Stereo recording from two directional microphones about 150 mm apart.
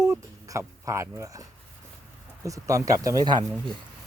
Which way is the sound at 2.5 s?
20° right (ahead or behind).